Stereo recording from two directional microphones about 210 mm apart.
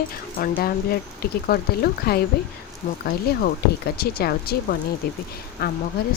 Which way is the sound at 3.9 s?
45° left (ahead or behind).